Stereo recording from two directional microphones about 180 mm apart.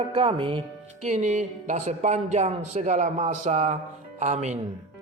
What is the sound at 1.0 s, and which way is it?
A man's voice, 40° right (ahead or behind).